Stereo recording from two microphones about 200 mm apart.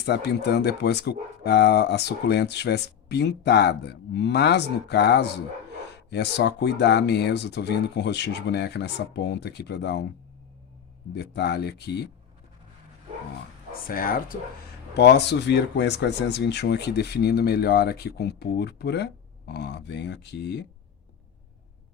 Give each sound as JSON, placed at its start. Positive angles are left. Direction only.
{"t": 0.0, "sound": "speech", "side_deg": 55}
{"t": 11.1, "sound": "speech", "side_deg": 55}
{"t": 13.8, "sound": "speech", "side_deg": 45}
{"t": 14.9, "sound": "speech", "side_deg": 55}